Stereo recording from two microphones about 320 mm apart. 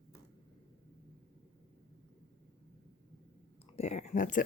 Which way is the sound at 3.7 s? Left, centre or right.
Left.